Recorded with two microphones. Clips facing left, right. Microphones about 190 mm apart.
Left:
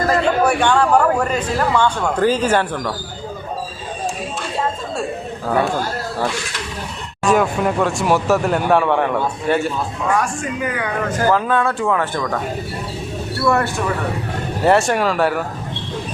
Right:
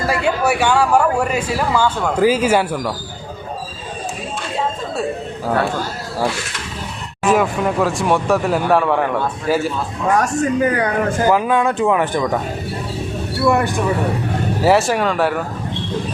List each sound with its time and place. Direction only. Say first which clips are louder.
0.1 s a man's voice: left 1 dB; 5° right (ahead or behind)
7.3 s speech: even; centre (ahead or behind)
10.2 s speech: right 5 dB; 40° right (ahead or behind)
11.3 s a man's voice: even; 15° right (ahead or behind)
13.4 s a man's voice: right 2 dB; 15° right (ahead or behind)
14.6 s speech: even; centre (ahead or behind)